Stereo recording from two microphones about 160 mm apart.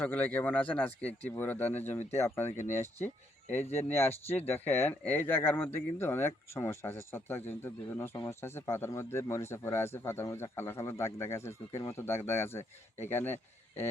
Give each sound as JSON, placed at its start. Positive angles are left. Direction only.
{"t": 0.0, "sound": "speech", "side_deg": 10}
{"t": 3.5, "sound": "speech", "side_deg": 15}